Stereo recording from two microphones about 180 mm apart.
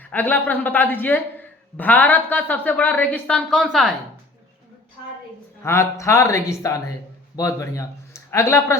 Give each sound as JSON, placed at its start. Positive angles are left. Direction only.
{"t": 0.0, "sound": "a man's voice", "side_deg": 10}
{"t": 5.6, "sound": "a man's voice", "side_deg": 15}